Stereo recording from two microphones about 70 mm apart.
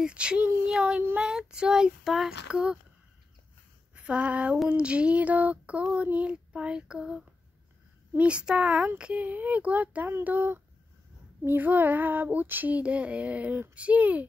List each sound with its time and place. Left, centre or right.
0.0 s child singing: centre
2.4 s child singing: centre
3.9 s speech: centre
4.6 s child singing: centre
8.8 s female singing: centre